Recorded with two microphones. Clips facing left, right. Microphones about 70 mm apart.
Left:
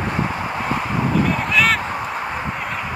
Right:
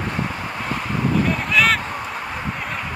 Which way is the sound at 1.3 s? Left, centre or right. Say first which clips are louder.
Even; centre.